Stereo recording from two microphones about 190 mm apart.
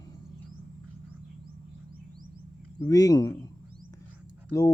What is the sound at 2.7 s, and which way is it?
Speech, 20° left (ahead or behind).